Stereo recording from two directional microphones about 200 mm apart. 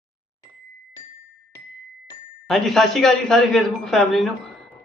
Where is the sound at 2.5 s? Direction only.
Centre (ahead or behind).